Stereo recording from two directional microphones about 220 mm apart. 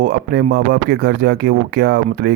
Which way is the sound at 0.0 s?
40° right (ahead or behind).